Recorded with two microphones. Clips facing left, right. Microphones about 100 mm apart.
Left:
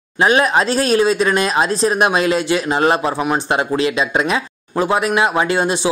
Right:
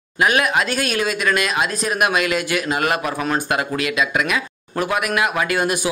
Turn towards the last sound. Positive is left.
turn(degrees=25)  # may be behind; listen again after turning